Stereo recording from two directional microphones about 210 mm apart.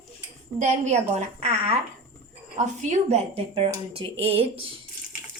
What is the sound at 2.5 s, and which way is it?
A woman's voice, 35° right (ahead or behind).